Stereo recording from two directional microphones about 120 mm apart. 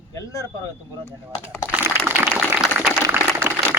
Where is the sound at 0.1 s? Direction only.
25° left (ahead or behind).